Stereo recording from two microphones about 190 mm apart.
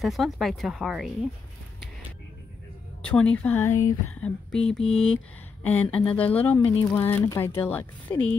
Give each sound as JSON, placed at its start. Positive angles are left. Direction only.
{"t": 0.0, "sound": "speech", "side_deg": 0}
{"t": 3.0, "sound": "speech", "side_deg": 5}